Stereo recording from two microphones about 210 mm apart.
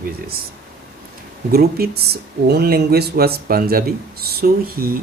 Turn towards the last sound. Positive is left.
turn(degrees=-45)  # may be behind; listen again after turning